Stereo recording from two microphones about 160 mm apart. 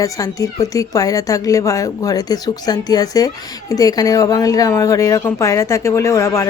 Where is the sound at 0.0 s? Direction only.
20° left (ahead or behind).